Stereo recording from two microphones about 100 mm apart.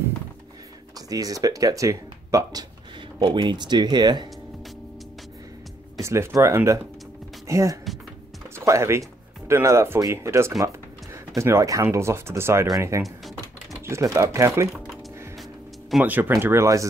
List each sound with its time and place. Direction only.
0.9 s speech: 40° right (ahead or behind)
3.2 s speech: 50° right (ahead or behind)
5.9 s speech: 30° right (ahead or behind)
13.0 s music: centre (ahead or behind)
13.8 s typing: 30° right (ahead or behind)
16.0 s speech: 20° right (ahead or behind)